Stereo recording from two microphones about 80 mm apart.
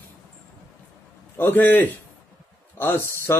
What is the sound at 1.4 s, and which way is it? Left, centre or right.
Speech, left.